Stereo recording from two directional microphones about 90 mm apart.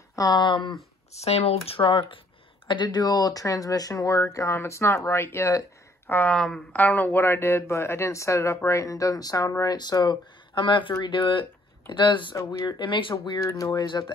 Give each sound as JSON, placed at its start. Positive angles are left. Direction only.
{"t": 0.1, "sound": "speech", "side_deg": 45}
{"t": 1.7, "sound": "speech", "side_deg": 75}
{"t": 2.7, "sound": "speech", "side_deg": 55}
{"t": 6.0, "sound": "speech", "side_deg": 20}
{"t": 6.3, "sound": "a woman's voice", "side_deg": 5}
{"t": 6.7, "sound": "speech", "side_deg": 20}
{"t": 9.8, "sound": "speech", "side_deg": 50}
{"t": 10.5, "sound": "speech", "side_deg": 65}
{"t": 13.4, "sound": "speech", "side_deg": 35}
{"t": 13.8, "sound": "speech", "side_deg": 60}